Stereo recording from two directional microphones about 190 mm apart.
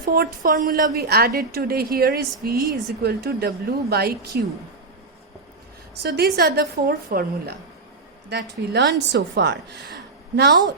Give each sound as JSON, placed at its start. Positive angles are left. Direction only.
{"t": 0.0, "sound": "a woman's voice", "side_deg": -50}
{"t": 6.0, "sound": "a woman's voice", "side_deg": -55}
{"t": 8.3, "sound": "a woman's voice", "side_deg": -65}